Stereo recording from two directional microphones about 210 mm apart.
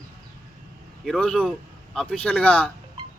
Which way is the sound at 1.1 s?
5° left (ahead or behind).